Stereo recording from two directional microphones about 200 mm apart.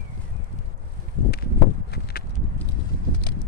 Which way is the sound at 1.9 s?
50° left (ahead or behind).